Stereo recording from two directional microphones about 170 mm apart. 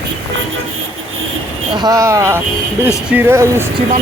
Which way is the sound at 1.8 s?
20° right (ahead or behind).